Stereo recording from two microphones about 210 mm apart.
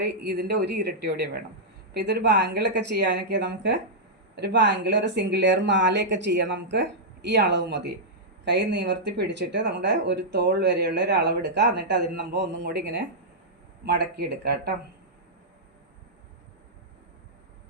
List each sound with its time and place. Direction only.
0.0 s speech: 50° right (ahead or behind)